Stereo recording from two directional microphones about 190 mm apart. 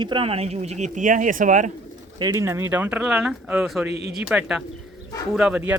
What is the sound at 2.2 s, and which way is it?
Speech, 20° right (ahead or behind).